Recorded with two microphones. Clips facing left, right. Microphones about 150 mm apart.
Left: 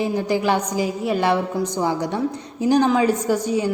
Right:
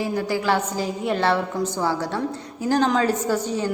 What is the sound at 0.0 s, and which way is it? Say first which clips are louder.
A woman's voice: left 3 dB; 20° left (ahead or behind).